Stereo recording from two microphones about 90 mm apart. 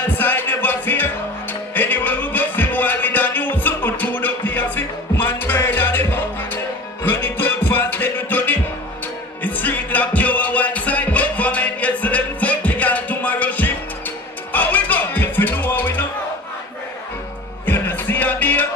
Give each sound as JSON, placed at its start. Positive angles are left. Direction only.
{"t": 0.0, "sound": "music", "side_deg": 20}
{"t": 17.6, "sound": "music", "side_deg": 20}